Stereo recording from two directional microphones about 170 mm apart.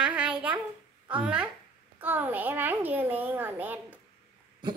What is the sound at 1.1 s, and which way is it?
A child's voice, 5° right (ahead or behind).